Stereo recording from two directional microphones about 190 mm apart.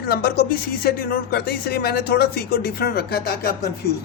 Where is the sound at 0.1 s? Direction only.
55° left (ahead or behind).